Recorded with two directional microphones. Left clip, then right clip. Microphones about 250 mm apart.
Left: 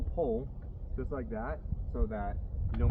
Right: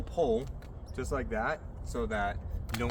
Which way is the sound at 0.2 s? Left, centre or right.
Centre.